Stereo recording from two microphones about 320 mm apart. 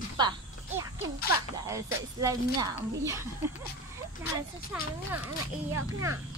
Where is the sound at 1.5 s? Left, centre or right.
Centre.